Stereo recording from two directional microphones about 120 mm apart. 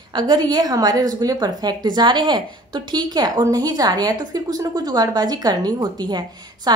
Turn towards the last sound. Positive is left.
turn(degrees=-35)  # may be behind; listen again after turning